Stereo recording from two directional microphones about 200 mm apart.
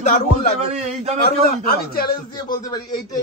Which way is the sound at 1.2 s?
50° left (ahead or behind).